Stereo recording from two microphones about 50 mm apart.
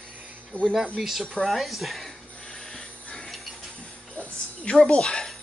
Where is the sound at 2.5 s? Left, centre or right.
Centre.